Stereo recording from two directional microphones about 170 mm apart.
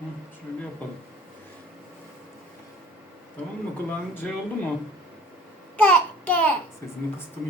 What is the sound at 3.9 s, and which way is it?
Speech, 10° left (ahead or behind).